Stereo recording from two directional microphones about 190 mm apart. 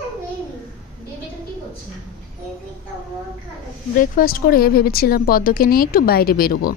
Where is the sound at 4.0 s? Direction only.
50° left (ahead or behind).